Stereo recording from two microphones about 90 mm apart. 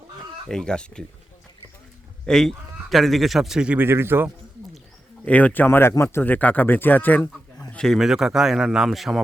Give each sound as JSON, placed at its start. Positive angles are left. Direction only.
{"t": 0.4, "sound": "speech", "side_deg": 10}
{"t": 2.2, "sound": "a man's voice", "side_deg": 5}
{"t": 3.8, "sound": "a man's voice", "side_deg": -25}
{"t": 5.2, "sound": "speech", "side_deg": 15}
{"t": 7.7, "sound": "a man's voice", "side_deg": 10}
{"t": 7.9, "sound": "speech", "side_deg": -5}